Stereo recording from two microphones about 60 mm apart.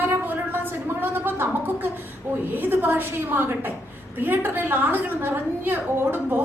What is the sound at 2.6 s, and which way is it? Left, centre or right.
A woman's voice, right.